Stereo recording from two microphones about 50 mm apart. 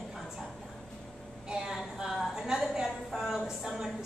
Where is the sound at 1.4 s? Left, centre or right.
Centre.